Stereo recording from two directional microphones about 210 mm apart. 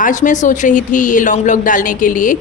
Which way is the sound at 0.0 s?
35° left (ahead or behind).